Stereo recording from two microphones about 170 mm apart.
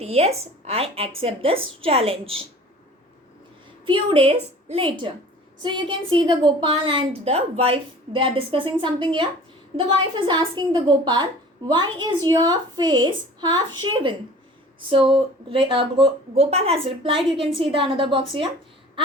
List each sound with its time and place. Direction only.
0.0 s speech: 40° right (ahead or behind)
3.8 s a woman's voice: 30° right (ahead or behind)